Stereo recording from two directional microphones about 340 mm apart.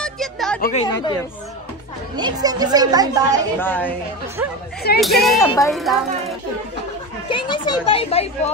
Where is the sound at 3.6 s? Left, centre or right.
Centre.